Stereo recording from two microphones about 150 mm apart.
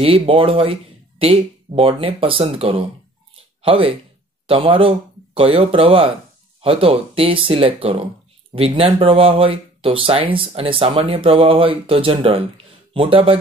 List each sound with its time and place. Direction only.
0.0 s speech: 35° right (ahead or behind)